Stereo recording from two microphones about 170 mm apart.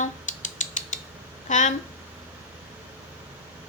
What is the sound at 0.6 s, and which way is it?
Mechanisms, 50° left (ahead or behind).